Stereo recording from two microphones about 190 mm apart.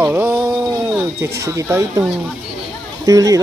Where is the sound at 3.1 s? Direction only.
20° right (ahead or behind).